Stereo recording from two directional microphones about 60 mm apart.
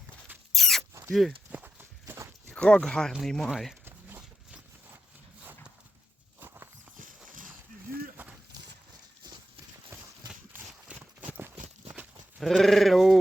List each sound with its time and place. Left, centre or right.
0.5 s mouse: centre
1.5 s clip-clop: right
2.5 s speech: centre
6.4 s walk: right
8.1 s horse: right
12.4 s speech: centre